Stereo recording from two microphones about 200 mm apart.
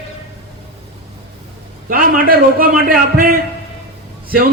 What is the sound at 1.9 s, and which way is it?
A man's voice, 45° right (ahead or behind).